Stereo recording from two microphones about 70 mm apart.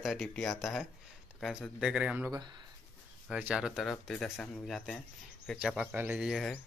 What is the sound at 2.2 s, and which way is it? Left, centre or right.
Speech, right.